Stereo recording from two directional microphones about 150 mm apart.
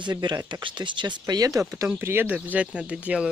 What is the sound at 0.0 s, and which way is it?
Speech, 30° right (ahead or behind).